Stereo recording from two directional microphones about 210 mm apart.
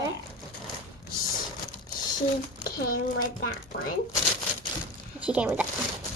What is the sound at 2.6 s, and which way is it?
Speech, 45° left (ahead or behind).